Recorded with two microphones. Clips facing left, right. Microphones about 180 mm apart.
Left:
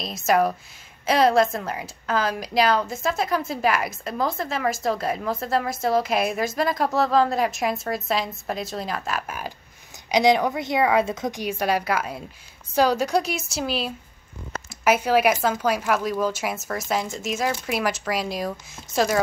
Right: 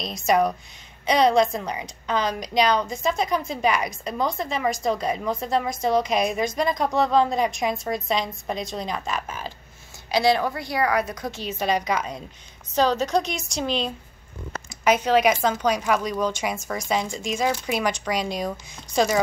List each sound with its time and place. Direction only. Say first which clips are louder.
0.0 s a woman's voice: even; 5° left (ahead or behind)
10.1 s a woman's voice: left 2 dB; 20° left (ahead or behind); by 19.2 s centre (ahead or behind)